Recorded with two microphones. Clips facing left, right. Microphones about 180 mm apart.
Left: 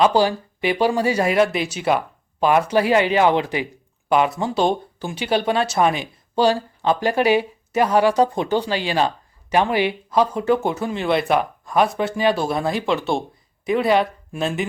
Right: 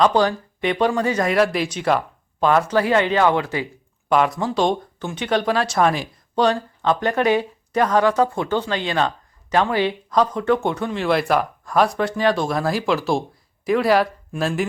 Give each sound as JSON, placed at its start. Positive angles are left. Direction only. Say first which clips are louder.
{"t": 0.0, "sound": "speech", "louder": "even", "side_deg": 10}
{"t": 2.5, "sound": "speech", "louder": "left 1 dB", "side_deg": 15}
{"t": 4.1, "sound": "speech", "louder": "even", "side_deg": 5}